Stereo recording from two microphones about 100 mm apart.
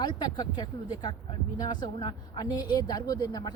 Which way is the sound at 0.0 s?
45° left (ahead or behind).